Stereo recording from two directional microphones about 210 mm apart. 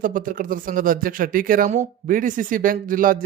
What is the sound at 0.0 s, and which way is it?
Speech, 40° right (ahead or behind).